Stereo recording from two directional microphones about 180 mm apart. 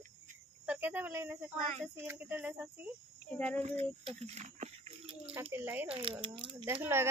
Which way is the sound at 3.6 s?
35° right (ahead or behind).